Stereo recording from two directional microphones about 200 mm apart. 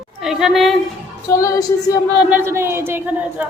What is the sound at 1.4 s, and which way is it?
Speech, 15° left (ahead or behind).